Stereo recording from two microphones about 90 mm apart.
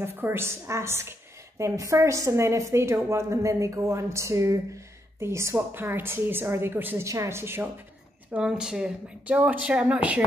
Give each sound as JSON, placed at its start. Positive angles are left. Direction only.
{"t": 0.0, "sound": "a woman's voice", "side_deg": -25}
{"t": 8.3, "sound": "a woman's voice", "side_deg": -10}